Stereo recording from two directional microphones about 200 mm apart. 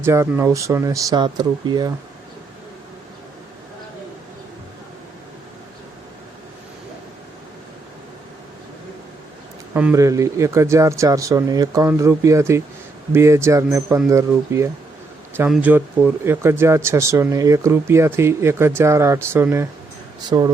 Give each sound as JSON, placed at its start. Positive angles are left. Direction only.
{"t": 0.0, "sound": "speech", "side_deg": -15}
{"t": 9.7, "sound": "speech", "side_deg": -10}